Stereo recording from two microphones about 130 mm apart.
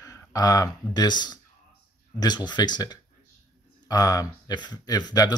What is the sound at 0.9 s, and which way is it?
Speech, 35° left (ahead or behind).